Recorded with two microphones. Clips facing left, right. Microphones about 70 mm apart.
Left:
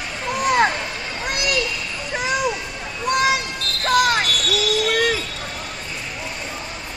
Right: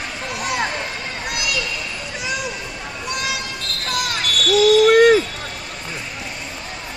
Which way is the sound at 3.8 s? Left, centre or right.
Left.